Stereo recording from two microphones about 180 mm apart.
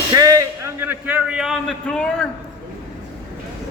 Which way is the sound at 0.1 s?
20° right (ahead or behind).